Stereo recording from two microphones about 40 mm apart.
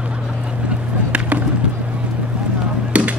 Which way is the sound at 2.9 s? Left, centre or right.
Right.